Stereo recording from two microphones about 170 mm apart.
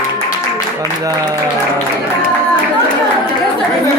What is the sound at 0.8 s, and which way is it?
Speech, 20° right (ahead or behind).